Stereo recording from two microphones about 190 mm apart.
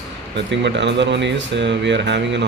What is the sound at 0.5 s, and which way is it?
Speech, 70° right (ahead or behind).